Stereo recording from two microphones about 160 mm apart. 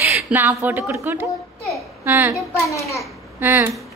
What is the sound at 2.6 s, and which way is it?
Speech, 20° left (ahead or behind).